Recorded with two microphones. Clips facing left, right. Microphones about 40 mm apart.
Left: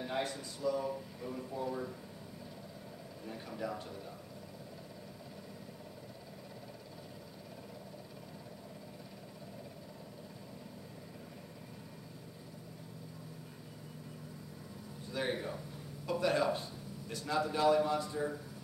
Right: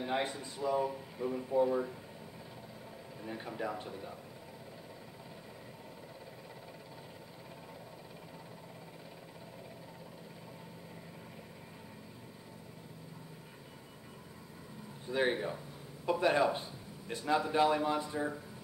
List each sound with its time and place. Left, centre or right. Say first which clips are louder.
0.0 s speech: right 2 dB; right
3.3 s speech: right 2 dB; right
15.0 s speech: right 5 dB; right